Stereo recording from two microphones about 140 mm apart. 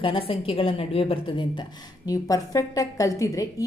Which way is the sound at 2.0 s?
25° left (ahead or behind).